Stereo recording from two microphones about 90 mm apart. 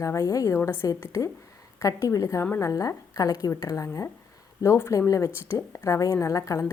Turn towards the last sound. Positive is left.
turn(degrees=40)  # may be behind; listen again after turning